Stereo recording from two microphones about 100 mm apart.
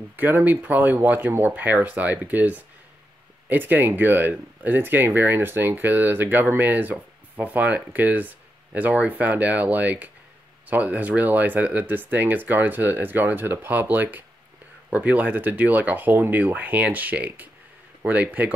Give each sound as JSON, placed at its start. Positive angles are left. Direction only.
{"t": 0.1, "sound": "speech", "side_deg": -20}